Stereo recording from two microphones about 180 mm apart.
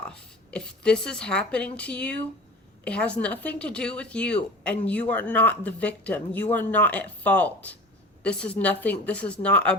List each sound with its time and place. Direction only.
0.5 s speech: 5° left (ahead or behind)